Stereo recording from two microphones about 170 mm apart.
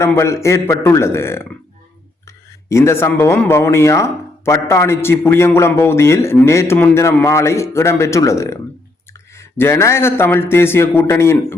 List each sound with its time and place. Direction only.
0.0 s speech: 15° left (ahead or behind)